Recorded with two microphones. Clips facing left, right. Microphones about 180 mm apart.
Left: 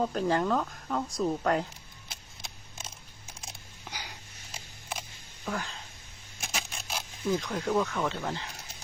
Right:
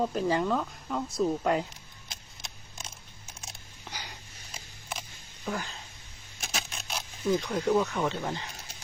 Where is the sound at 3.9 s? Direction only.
10° left (ahead or behind).